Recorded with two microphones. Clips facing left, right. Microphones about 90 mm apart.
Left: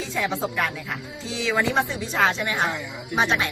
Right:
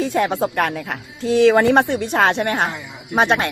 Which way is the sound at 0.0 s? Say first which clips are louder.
Right 8 dB; 55° right (ahead or behind).